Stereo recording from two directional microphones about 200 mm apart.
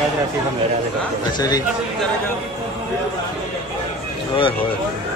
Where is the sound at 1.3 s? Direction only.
20° left (ahead or behind).